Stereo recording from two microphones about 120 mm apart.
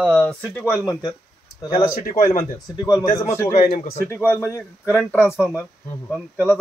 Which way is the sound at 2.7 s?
25° left (ahead or behind).